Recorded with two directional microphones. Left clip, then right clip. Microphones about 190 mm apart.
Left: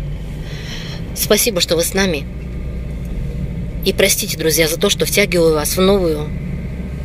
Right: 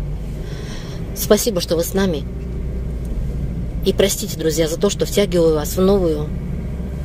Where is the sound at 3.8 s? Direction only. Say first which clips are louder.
Left 2 dB; 10° right (ahead or behind).